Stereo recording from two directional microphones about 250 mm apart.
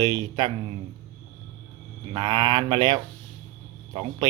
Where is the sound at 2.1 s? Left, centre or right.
Centre.